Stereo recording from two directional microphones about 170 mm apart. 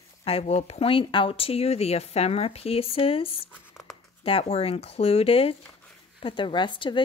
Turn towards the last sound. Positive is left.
turn(degrees=30)  # may be behind; listen again after turning